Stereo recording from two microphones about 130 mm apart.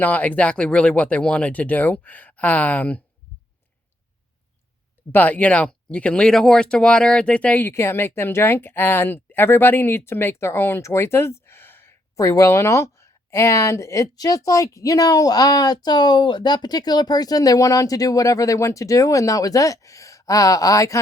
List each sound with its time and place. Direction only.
0.0 s speech: 10° left (ahead or behind)
5.1 s speech: 10° left (ahead or behind)